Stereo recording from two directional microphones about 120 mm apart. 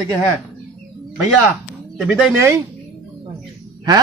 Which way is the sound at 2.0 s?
5° right (ahead or behind).